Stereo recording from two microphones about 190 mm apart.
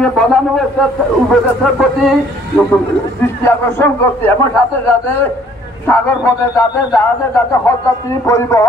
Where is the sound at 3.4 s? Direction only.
15° left (ahead or behind).